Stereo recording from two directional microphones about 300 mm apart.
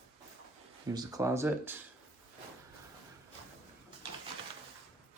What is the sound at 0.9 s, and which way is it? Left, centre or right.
Speech, centre.